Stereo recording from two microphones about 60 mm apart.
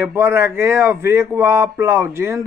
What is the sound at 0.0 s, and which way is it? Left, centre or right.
Speech, right.